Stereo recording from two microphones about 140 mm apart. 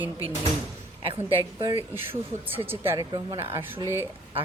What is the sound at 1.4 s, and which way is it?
Speech, 30° right (ahead or behind).